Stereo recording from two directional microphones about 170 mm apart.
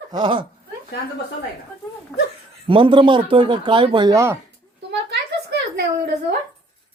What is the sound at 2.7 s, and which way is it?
Speech, 30° right (ahead or behind).